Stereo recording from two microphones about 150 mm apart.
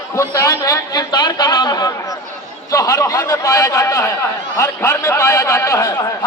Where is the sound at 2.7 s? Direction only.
20° left (ahead or behind).